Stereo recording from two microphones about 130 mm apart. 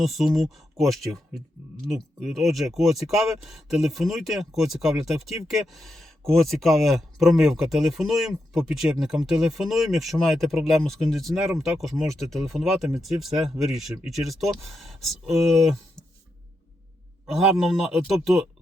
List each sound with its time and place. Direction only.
0.0 s speech: centre (ahead or behind)
17.3 s speech: centre (ahead or behind)